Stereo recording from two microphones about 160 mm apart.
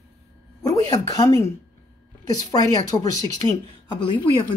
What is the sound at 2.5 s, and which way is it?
A woman's voice, 25° left (ahead or behind).